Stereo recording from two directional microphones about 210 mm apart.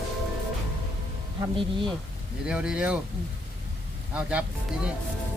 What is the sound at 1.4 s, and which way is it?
Speech, 25° right (ahead or behind).